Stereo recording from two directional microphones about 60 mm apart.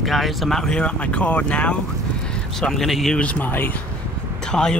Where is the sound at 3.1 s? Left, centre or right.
Left.